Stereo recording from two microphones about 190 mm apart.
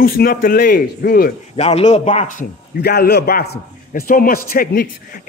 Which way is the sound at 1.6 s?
35° left (ahead or behind).